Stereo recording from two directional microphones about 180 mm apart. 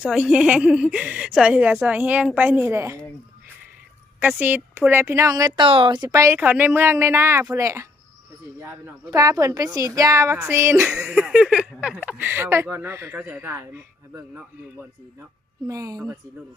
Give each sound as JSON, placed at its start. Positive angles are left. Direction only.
{"t": 0.0, "sound": "speech", "side_deg": -5}
{"t": 4.2, "sound": "speech", "side_deg": -10}
{"t": 9.0, "sound": "a woman's voice", "side_deg": -20}